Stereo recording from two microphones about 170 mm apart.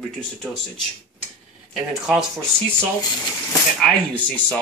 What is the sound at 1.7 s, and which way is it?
Speech, 5° right (ahead or behind).